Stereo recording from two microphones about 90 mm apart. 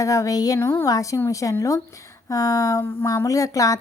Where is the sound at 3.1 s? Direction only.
35° left (ahead or behind).